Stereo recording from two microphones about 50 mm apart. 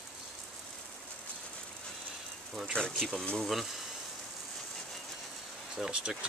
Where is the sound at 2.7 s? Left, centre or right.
Centre.